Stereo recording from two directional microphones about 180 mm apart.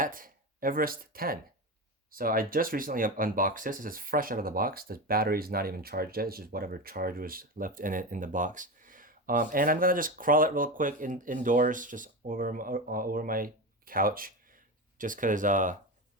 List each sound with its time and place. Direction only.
0.0 s speech: 50° right (ahead or behind)